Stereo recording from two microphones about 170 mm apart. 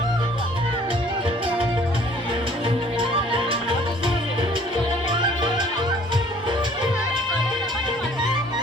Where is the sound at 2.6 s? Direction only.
30° right (ahead or behind).